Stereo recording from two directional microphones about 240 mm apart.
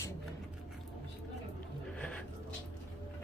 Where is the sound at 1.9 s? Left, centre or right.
Centre.